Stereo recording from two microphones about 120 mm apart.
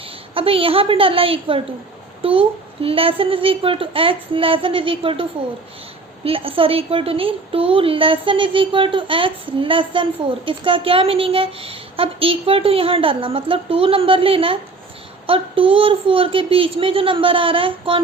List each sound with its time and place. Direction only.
0.3 s a child's voice: 50° right (ahead or behind)
6.2 s a child's voice: 50° right (ahead or behind)